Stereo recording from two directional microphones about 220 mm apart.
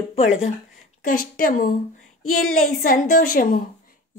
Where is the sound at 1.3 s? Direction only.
40° left (ahead or behind).